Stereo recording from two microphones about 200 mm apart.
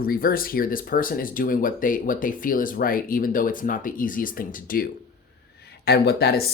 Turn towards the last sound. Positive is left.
turn(degrees=55)  # may be behind; listen again after turning